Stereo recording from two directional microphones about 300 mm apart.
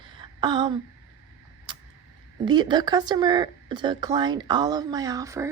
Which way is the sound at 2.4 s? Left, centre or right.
Centre.